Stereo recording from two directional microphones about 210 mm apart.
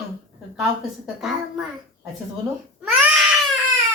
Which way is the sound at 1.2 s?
Centre (ahead or behind).